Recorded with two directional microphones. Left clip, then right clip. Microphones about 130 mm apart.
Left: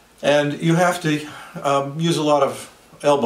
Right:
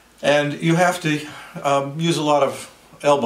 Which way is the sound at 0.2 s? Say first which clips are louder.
Even; centre (ahead or behind).